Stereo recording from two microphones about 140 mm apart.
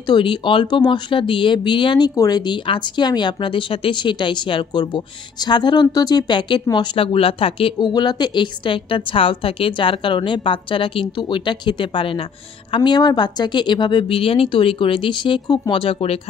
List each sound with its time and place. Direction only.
0.0 s speech: 35° left (ahead or behind)
15.7 s speech: 40° left (ahead or behind)